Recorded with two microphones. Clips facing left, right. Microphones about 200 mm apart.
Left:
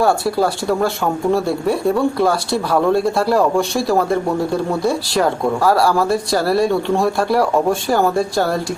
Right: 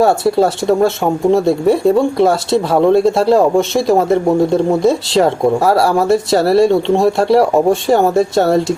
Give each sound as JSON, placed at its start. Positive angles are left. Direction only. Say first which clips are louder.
{"t": 0.0, "sound": "speech", "louder": "right 4 dB", "side_deg": -25}